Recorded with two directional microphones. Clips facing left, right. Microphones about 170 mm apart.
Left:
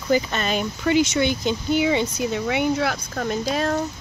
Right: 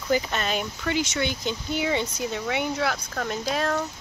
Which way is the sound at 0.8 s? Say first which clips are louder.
Left 9 dB; 15° left (ahead or behind).